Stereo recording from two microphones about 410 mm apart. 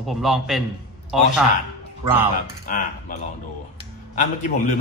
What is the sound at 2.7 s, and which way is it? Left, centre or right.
Speech, centre.